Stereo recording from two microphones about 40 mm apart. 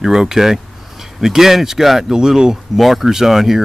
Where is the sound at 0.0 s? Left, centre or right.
Centre.